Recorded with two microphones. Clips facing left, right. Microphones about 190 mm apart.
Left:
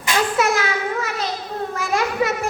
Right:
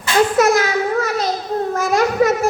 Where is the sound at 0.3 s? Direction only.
40° right (ahead or behind).